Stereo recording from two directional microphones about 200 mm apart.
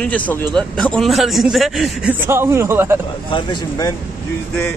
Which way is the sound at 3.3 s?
25° left (ahead or behind).